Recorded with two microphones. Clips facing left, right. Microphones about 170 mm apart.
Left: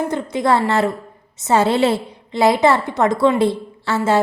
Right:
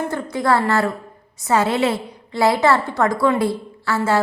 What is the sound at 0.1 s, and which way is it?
A woman's voice, 20° left (ahead or behind).